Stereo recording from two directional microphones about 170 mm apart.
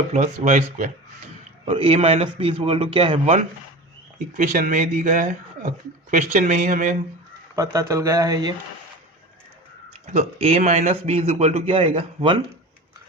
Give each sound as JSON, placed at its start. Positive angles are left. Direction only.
{"t": 0.1, "sound": "speech", "side_deg": -45}
{"t": 1.6, "sound": "a man's voice", "side_deg": -35}
{"t": 4.4, "sound": "speech", "side_deg": -50}
{"t": 7.5, "sound": "speech", "side_deg": -20}
{"t": 10.1, "sound": "a man's voice", "side_deg": -40}